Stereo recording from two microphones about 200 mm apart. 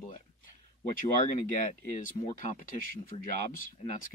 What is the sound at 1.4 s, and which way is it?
Speech, 40° left (ahead or behind).